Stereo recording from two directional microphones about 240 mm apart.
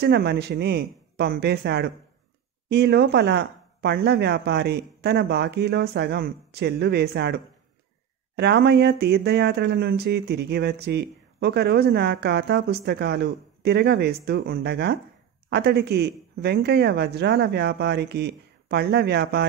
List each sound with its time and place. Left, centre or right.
0.0 s speech: right